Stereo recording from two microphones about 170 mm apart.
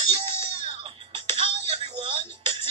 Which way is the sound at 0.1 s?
35° right (ahead or behind).